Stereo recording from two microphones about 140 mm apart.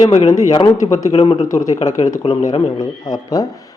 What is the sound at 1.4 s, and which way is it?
Speech, 25° left (ahead or behind).